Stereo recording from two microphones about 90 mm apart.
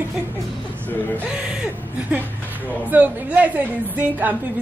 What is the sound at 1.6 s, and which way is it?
Speech, 15° right (ahead or behind).